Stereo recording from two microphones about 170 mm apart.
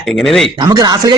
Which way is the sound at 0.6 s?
25° right (ahead or behind).